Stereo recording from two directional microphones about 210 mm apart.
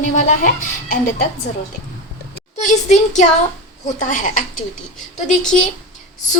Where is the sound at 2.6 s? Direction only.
35° left (ahead or behind).